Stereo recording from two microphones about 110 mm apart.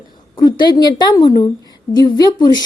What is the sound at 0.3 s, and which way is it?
A woman's voice, 40° left (ahead or behind).